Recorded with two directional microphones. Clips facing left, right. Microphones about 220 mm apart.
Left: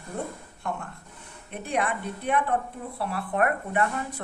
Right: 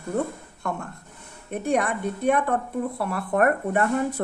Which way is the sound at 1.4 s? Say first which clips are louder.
Right 5 dB; 45° right (ahead or behind).